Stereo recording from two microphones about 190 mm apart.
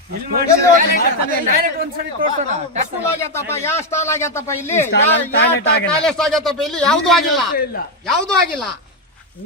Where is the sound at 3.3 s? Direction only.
15° left (ahead or behind).